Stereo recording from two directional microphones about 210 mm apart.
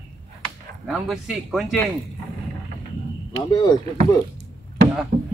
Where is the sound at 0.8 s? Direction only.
Centre (ahead or behind).